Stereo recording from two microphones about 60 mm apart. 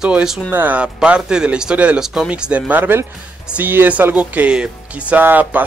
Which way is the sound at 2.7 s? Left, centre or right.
Right.